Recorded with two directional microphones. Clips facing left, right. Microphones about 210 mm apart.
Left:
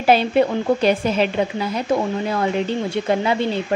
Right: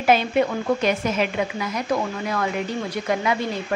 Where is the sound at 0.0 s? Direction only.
30° left (ahead or behind).